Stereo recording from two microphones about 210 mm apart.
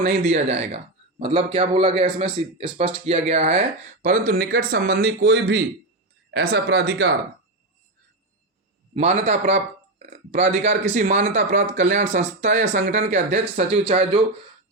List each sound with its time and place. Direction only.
0.0 s speech: 35° right (ahead or behind)
4.3 s speech: 45° right (ahead or behind)
9.0 s a man's voice: 30° right (ahead or behind)